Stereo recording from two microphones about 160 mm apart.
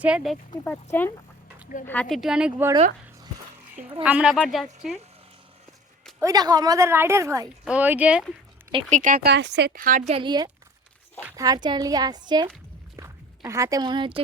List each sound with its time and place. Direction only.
0.0 s speech: 5° right (ahead or behind)
0.6 s speech: 10° left (ahead or behind); by 2.6 s 5° right (ahead or behind)
4.0 s speech: 5° right (ahead or behind)
6.1 s a woman's voice: 25° right (ahead or behind)
7.6 s speech: 10° right (ahead or behind)
8.9 s speech: 55° right (ahead or behind)
9.2 s speech: 90° right; by 10.0 s 60° right (ahead or behind)
10.1 s a woman's voice: 30° right (ahead or behind)
11.2 s speech: 10° right (ahead or behind)
11.4 s a woman's voice: 25° right (ahead or behind)